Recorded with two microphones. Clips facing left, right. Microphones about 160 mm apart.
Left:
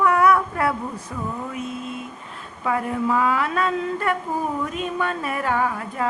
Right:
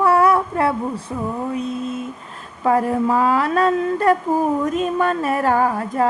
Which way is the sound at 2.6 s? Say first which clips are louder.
Right 6 dB; 40° right (ahead or behind).